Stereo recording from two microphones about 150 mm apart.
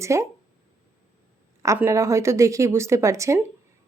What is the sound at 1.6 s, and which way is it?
Speech, 20° right (ahead or behind).